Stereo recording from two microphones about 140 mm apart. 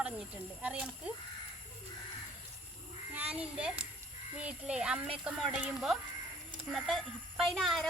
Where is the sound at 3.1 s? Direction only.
10° right (ahead or behind).